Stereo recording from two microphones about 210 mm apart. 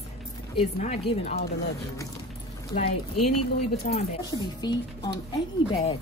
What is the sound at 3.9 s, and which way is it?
Speech, 40° left (ahead or behind).